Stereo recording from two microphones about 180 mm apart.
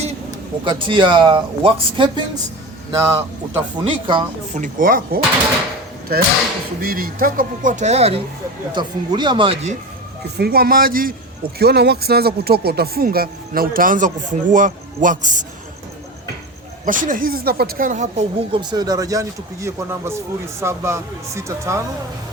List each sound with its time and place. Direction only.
0.6 s speech: 25° right (ahead or behind)
4.5 s speech: 45° right (ahead or behind); by 9.6 s 25° right (ahead or behind)
10.3 s speech: 60° right (ahead or behind)
11.6 s speech: 65° right (ahead or behind); by 15.4 s 45° right (ahead or behind)
16.8 s speech: 45° right (ahead or behind)
18.5 s speech: 25° right (ahead or behind)